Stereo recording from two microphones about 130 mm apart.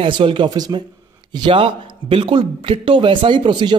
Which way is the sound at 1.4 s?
40° right (ahead or behind).